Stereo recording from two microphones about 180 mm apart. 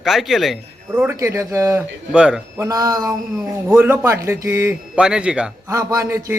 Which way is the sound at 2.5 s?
20° right (ahead or behind).